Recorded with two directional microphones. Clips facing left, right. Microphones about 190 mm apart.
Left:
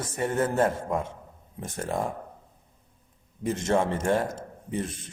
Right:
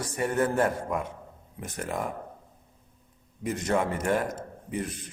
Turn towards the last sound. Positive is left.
turn(degrees=25)  # may be behind; listen again after turning